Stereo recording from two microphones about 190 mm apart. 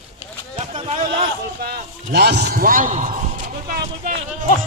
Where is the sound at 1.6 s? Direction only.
55° right (ahead or behind).